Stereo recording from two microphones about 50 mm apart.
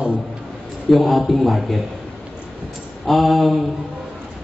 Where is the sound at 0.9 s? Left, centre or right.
Centre.